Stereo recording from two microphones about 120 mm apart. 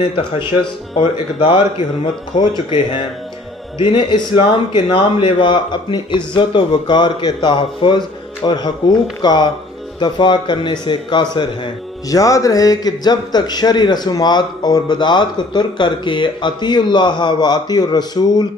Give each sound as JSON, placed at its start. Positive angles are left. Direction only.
{"t": 0.1, "sound": "a man's voice", "side_deg": 45}